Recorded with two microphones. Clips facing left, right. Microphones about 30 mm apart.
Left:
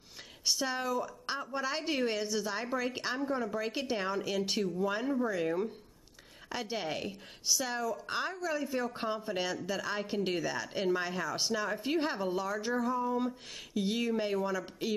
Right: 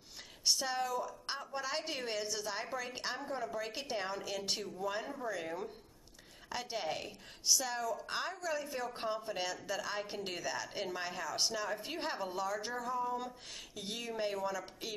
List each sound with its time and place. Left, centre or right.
0.5 s a woman's voice: centre